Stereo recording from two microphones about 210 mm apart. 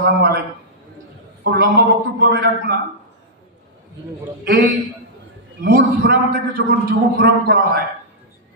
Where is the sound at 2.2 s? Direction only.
50° right (ahead or behind).